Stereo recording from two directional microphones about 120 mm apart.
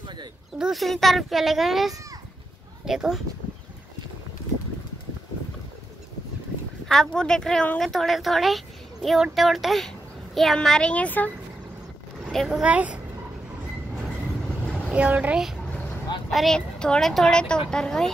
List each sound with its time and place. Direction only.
0.0 s a sound: 40° right (ahead or behind)
0.6 s a woman's voice: centre (ahead or behind)
6.9 s a woman's voice: 5° left (ahead or behind)
12.3 s speech: centre (ahead or behind)
12.6 s speech: 10° right (ahead or behind)
14.9 s speech: 10° right (ahead or behind)
16.3 s a woman's voice: 5° left (ahead or behind)